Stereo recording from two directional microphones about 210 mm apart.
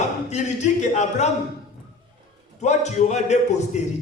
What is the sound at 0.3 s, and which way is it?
Speech, 35° left (ahead or behind).